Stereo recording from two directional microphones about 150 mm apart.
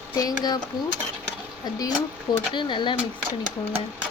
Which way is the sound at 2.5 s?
30° left (ahead or behind).